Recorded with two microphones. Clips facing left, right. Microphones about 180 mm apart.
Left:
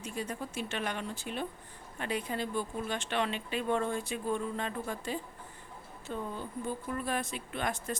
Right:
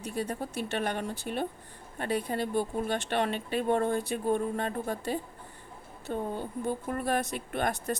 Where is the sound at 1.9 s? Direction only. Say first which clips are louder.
Right 4 dB; 45° right (ahead or behind).